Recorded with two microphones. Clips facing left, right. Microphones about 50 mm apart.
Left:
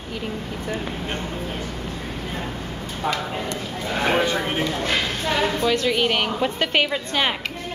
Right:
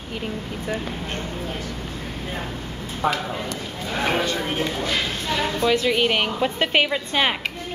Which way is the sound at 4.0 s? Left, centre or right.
Centre.